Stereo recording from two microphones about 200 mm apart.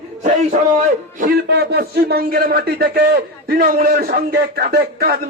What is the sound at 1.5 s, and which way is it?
A man's voice, 55° right (ahead or behind).